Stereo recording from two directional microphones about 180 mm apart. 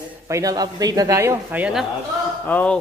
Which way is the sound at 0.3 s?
20° right (ahead or behind).